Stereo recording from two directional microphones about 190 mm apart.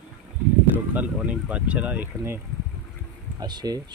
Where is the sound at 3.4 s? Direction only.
20° right (ahead or behind).